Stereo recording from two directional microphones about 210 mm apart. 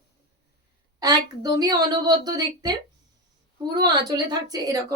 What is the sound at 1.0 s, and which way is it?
A woman's voice, 20° right (ahead or behind).